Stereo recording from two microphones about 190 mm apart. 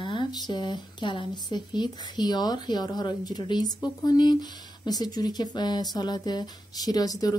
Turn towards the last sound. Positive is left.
turn(degrees=20)  # may be behind; listen again after turning